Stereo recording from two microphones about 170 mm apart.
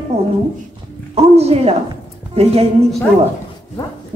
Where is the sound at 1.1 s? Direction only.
35° right (ahead or behind).